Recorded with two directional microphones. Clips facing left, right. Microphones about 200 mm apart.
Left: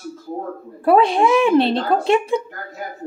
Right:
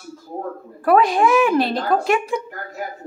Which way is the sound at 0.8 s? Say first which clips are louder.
Left 1 dB; 30° left (ahead or behind).